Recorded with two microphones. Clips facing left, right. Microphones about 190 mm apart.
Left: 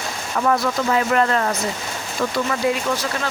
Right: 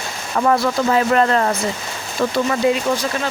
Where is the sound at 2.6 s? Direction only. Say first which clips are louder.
Right 4 dB; 25° right (ahead or behind).